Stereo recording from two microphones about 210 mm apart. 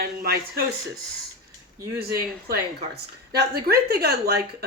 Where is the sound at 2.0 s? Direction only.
50° right (ahead or behind).